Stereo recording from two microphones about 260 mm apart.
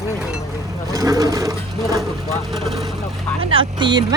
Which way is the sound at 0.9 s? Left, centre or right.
Centre.